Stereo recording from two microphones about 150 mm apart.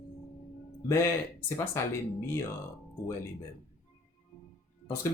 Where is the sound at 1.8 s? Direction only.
20° left (ahead or behind).